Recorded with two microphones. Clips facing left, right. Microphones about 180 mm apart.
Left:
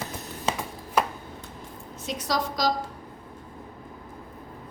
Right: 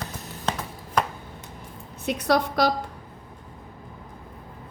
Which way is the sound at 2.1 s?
60° right (ahead or behind).